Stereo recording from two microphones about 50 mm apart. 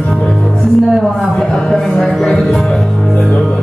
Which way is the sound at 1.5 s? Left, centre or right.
Centre.